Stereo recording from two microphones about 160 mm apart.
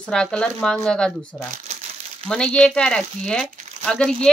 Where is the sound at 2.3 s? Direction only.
5° left (ahead or behind).